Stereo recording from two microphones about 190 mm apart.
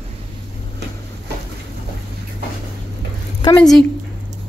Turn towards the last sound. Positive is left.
turn(degrees=0)  # may be behind; listen again after turning